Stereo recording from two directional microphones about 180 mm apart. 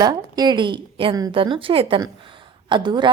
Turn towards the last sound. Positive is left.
turn(degrees=-25)  # may be behind; listen again after turning